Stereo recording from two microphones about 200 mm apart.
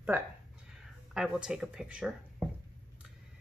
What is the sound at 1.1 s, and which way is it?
Speech, 5° right (ahead or behind).